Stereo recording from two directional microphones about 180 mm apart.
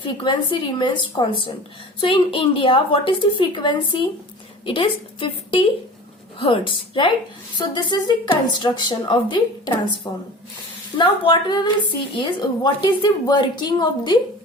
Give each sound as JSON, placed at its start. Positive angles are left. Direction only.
{"t": 0.0, "sound": "speech", "side_deg": 30}